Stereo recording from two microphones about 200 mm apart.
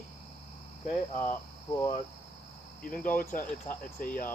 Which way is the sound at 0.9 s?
35° left (ahead or behind).